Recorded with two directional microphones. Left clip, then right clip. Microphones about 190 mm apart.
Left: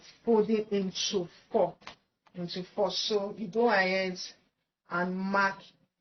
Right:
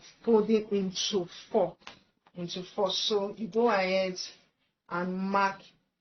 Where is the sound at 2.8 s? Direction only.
25° right (ahead or behind).